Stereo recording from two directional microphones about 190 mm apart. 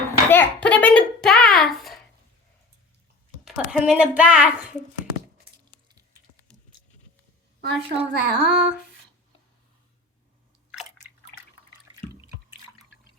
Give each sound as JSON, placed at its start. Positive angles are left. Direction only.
{"t": 0.3, "sound": "a child's voice", "side_deg": 10}
{"t": 3.4, "sound": "a woman's voice", "side_deg": -5}
{"t": 7.6, "sound": "a sound", "side_deg": -55}